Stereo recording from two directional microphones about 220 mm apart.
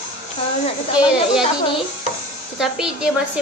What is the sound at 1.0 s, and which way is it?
Speech, 5° right (ahead or behind).